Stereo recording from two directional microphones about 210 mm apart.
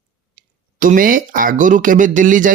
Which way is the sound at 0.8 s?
40° right (ahead or behind).